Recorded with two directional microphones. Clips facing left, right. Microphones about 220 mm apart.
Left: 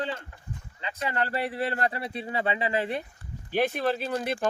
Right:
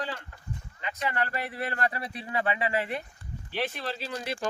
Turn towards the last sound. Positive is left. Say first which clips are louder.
# left 6 dB
turn(degrees=55)  # may be behind; listen again after turning